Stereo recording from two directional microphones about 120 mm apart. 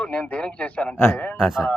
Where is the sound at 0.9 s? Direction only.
20° left (ahead or behind).